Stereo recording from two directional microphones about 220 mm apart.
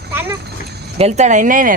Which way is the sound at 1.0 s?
30° right (ahead or behind).